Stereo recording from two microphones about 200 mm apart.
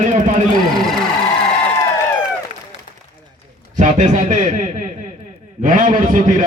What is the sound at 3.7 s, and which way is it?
A man's voice, 40° right (ahead or behind).